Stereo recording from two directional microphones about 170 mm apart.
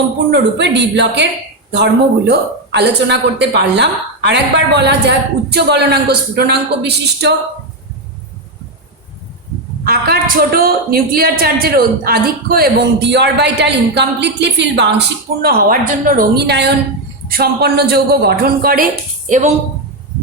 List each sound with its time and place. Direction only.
0.3 s a woman's voice: 90° right
1.7 s a woman's voice: 80° right
9.8 s a woman's voice: 65° right (ahead or behind)
17.2 s a man's voice: 65° right (ahead or behind)